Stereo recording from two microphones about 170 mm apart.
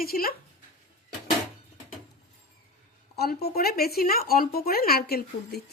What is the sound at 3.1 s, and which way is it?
A woman's voice, 70° left (ahead or behind).